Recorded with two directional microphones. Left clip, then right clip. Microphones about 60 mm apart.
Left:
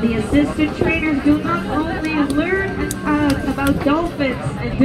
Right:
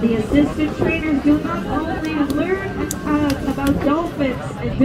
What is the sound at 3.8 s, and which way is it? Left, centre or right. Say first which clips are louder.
Speech: left 1 dB; right.